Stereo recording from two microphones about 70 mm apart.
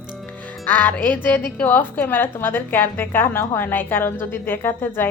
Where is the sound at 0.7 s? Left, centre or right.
Left.